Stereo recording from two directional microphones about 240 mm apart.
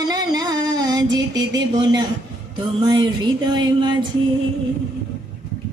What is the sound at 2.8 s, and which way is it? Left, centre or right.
Music, centre.